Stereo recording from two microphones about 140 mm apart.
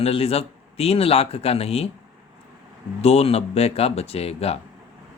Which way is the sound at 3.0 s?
50° left (ahead or behind).